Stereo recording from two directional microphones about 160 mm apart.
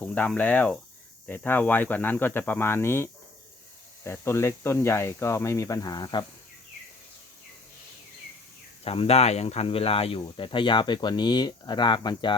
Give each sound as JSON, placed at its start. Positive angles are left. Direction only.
{"t": 0.0, "sound": "speech", "side_deg": 10}
{"t": 8.8, "sound": "speech", "side_deg": 35}